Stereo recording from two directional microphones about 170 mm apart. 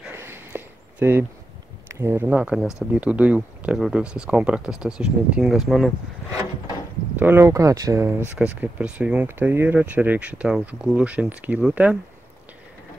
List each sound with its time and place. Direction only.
0.0 s a sound: 15° right (ahead or behind)
1.9 s speech: 15° right (ahead or behind)
7.2 s speech: 10° right (ahead or behind)